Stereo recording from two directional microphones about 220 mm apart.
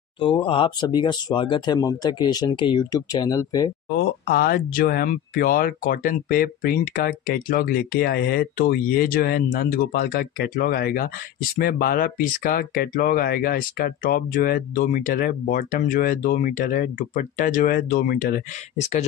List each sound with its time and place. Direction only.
0.4 s speech: 25° left (ahead or behind)
3.9 s speech: 45° left (ahead or behind)